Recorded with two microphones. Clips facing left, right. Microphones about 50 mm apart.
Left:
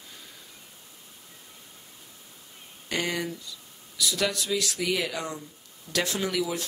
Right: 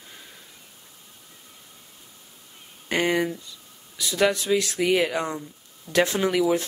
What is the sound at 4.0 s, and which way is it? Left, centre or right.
Speech, right.